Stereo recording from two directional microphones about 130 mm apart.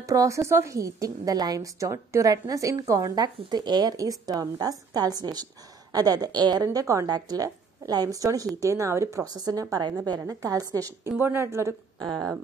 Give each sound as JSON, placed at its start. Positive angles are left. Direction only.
{"t": 0.0, "sound": "a woman's voice", "side_deg": -25}
{"t": 12.0, "sound": "speech", "side_deg": -30}